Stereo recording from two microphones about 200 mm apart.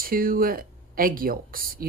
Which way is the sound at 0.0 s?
45° right (ahead or behind).